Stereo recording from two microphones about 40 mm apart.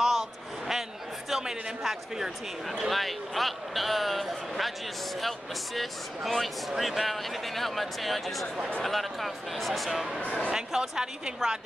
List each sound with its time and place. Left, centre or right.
0.0 s a sound: centre
1.3 s a man's voice: centre
5.8 s speech: centre
10.5 s a woman's voice: centre